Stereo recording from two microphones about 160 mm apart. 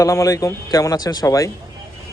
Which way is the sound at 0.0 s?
20° left (ahead or behind).